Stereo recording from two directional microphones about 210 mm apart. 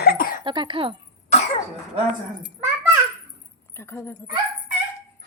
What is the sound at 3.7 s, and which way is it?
Speech, 10° left (ahead or behind).